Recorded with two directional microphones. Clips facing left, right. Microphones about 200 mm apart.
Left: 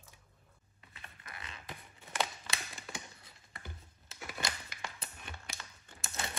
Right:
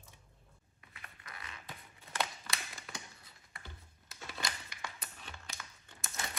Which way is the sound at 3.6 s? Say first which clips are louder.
Left 3 dB; 20° left (ahead or behind).